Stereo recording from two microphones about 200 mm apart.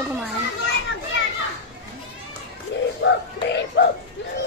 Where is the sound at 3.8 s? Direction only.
60° left (ahead or behind).